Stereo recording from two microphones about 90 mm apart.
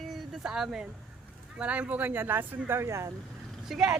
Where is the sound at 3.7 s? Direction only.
5° right (ahead or behind).